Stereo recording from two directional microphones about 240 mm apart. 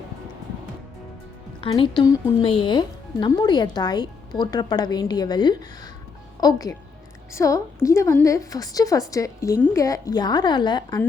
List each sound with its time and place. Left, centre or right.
1.6 s speech: left